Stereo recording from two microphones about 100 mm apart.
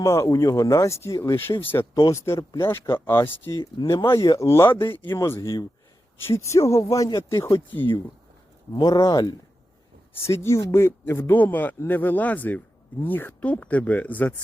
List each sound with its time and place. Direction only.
0.0 s speech: 25° left (ahead or behind)
8.7 s speech: 40° left (ahead or behind)
10.2 s speech: 30° left (ahead or behind)